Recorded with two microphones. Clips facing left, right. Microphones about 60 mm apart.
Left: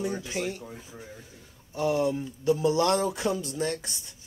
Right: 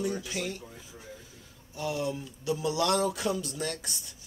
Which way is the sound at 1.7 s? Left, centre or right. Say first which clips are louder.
Left 6 dB; left.